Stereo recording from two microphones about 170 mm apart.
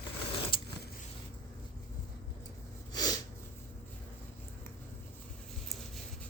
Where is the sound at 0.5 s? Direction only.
30° left (ahead or behind).